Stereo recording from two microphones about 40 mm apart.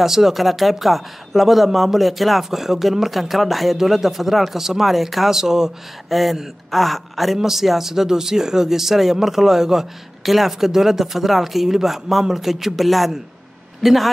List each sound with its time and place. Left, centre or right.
0.0 s speech: centre
6.0 s a man's voice: centre